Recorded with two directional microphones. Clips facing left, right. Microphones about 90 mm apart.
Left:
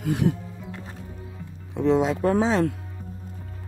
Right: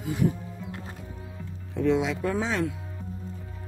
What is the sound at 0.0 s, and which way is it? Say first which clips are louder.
Speech: left 3 dB; 75° left (ahead or behind).